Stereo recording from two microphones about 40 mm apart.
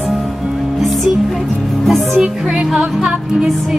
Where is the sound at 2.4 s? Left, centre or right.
Right.